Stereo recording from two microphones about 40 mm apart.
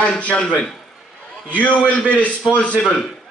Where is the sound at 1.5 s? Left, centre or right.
Left.